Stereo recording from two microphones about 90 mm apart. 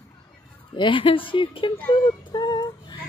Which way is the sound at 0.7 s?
65° left (ahead or behind).